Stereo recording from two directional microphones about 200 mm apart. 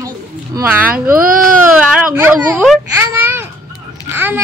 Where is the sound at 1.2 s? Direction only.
45° right (ahead or behind).